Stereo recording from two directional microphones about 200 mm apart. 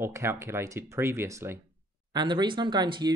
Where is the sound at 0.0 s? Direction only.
10° right (ahead or behind).